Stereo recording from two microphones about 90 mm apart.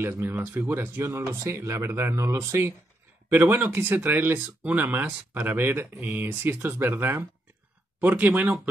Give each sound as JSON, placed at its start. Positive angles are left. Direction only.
{"t": 0.0, "sound": "speech", "side_deg": -25}